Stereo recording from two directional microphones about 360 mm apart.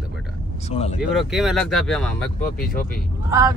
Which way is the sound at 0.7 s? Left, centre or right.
Centre.